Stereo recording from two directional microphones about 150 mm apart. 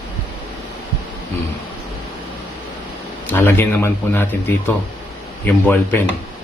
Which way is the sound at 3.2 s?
15° left (ahead or behind).